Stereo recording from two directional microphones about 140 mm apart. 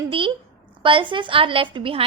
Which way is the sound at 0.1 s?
40° right (ahead or behind).